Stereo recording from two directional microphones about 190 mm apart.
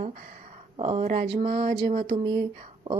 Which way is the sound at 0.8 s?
30° right (ahead or behind).